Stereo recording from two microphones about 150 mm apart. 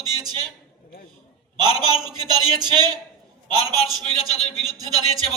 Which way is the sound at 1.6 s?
30° right (ahead or behind).